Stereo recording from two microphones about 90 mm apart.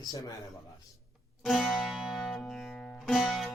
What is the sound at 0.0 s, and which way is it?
Speech, 40° left (ahead or behind).